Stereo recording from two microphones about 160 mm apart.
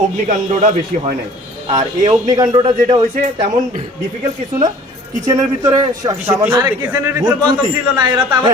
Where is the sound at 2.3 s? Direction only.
25° right (ahead or behind).